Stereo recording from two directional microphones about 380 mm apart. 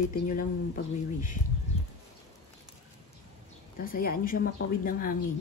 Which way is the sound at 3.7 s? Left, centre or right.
Left.